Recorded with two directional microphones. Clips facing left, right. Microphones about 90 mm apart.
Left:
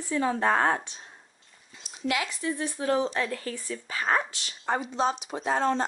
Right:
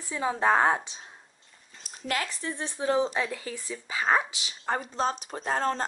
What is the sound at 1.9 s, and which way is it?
Speech, 40° right (ahead or behind).